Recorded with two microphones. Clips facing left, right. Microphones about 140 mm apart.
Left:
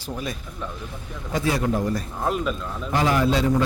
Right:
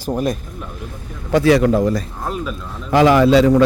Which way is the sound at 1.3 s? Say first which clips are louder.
Right 10 dB; 75° right (ahead or behind).